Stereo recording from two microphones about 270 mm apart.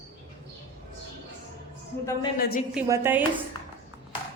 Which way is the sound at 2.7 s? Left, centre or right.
Centre.